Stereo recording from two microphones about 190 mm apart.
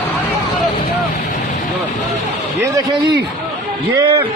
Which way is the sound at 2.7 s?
20° right (ahead or behind).